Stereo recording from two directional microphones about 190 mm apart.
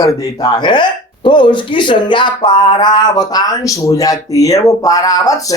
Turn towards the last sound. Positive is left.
turn(degrees=20)  # may be behind; listen again after turning